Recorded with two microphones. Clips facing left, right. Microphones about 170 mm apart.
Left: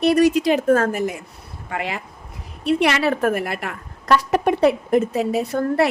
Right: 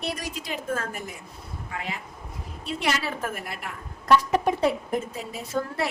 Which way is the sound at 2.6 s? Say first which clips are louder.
Left 10 dB; 65° left (ahead or behind).